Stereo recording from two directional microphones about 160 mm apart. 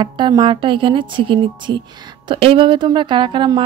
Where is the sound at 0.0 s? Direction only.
30° right (ahead or behind).